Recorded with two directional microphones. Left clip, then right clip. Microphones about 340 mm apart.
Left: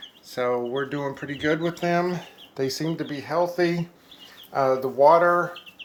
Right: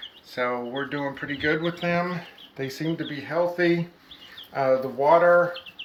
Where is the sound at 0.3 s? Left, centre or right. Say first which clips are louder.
Left 2 dB; centre.